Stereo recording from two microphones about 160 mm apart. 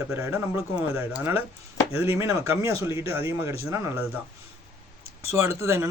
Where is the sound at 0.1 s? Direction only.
15° right (ahead or behind).